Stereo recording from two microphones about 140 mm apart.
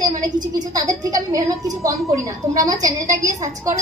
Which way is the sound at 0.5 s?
25° right (ahead or behind).